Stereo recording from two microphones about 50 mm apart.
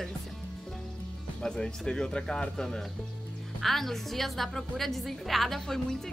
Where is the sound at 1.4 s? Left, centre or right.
Centre.